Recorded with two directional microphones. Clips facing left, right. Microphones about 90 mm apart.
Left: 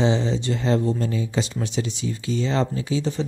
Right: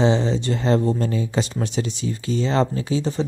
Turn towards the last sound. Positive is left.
turn(degrees=-40)  # may be behind; listen again after turning